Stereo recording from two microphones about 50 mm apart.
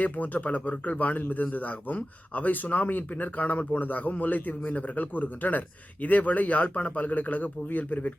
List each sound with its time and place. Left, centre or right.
0.0 s speech: left